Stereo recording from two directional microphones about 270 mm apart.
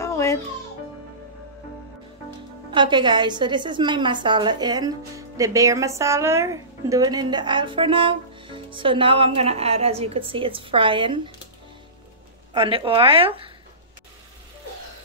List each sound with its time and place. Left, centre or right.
0.0 s music: centre
2.7 s a woman's voice: centre
12.5 s a woman's voice: centre